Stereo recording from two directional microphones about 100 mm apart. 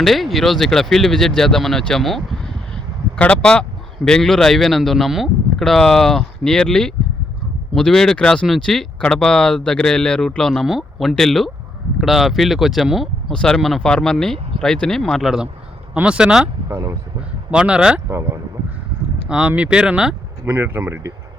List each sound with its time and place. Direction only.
0.0 s a man's voice: centre (ahead or behind)
16.6 s speech: 25° right (ahead or behind)
17.5 s speech: 10° right (ahead or behind)
19.3 s speech: 10° right (ahead or behind)
20.4 s speech: 25° right (ahead or behind)